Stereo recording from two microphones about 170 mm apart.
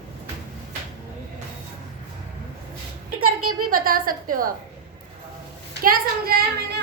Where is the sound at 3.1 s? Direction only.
60° right (ahead or behind).